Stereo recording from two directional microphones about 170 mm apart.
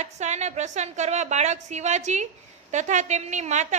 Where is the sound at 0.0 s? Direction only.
40° right (ahead or behind).